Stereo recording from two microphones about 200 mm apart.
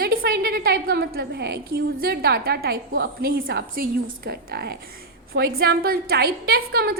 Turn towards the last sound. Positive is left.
turn(degrees=-50)  # may be behind; listen again after turning